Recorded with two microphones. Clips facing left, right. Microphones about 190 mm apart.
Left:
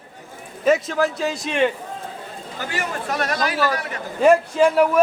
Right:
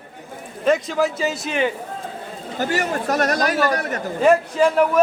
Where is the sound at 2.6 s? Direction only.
40° right (ahead or behind).